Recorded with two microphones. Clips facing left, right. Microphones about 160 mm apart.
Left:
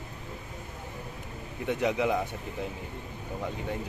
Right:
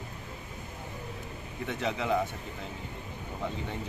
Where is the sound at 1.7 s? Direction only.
15° left (ahead or behind).